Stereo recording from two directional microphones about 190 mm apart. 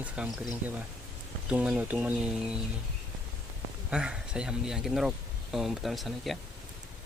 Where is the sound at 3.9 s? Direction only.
5° right (ahead or behind).